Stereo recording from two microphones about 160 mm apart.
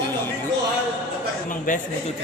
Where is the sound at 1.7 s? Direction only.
55° left (ahead or behind).